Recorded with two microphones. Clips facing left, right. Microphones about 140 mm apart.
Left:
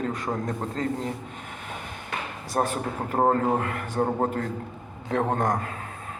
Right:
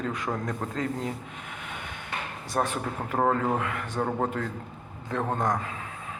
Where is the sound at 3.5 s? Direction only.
50° left (ahead or behind).